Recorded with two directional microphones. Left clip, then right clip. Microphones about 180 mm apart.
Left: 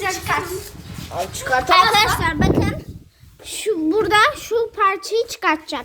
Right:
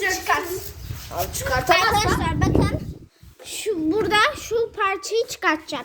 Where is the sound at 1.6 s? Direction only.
40° left (ahead or behind).